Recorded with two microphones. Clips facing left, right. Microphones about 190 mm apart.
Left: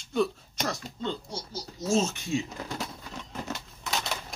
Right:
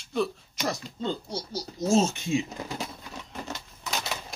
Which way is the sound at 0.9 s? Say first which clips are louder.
Right 3 dB; 35° right (ahead or behind).